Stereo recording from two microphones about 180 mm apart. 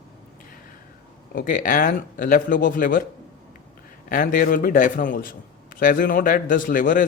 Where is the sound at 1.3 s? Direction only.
50° left (ahead or behind).